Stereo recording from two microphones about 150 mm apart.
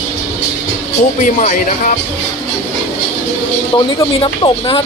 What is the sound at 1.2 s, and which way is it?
Speech, 55° left (ahead or behind).